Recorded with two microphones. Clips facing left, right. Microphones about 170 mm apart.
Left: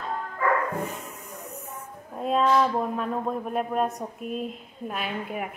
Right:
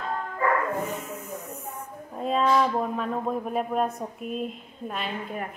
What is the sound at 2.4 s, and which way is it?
Speech, centre (ahead or behind).